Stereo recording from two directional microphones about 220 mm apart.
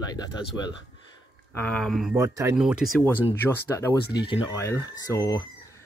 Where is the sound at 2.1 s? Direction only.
15° right (ahead or behind).